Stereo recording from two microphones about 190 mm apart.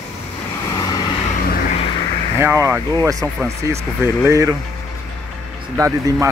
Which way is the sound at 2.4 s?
15° right (ahead or behind).